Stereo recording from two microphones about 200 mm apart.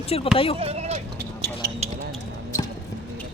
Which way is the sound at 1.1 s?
55° right (ahead or behind).